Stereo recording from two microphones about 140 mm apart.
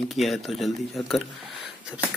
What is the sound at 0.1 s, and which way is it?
Speech, centre (ahead or behind).